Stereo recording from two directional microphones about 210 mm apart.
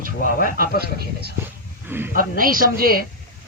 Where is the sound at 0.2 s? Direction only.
40° left (ahead or behind).